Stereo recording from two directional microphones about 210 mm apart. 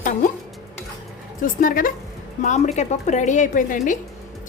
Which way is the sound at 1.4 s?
40° left (ahead or behind).